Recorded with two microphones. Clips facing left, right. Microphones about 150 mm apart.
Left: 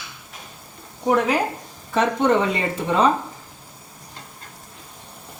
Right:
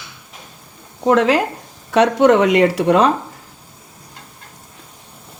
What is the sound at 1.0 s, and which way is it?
Speech, 90° right.